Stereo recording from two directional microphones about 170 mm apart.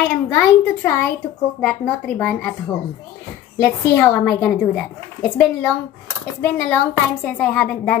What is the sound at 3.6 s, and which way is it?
A woman's voice, 15° left (ahead or behind).